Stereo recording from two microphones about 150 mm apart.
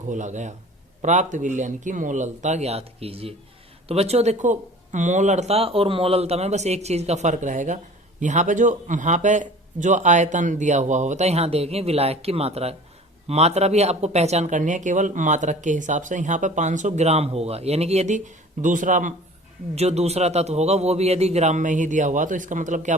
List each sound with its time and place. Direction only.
0.1 s speech: 55° right (ahead or behind)
19.7 s speech: 45° right (ahead or behind)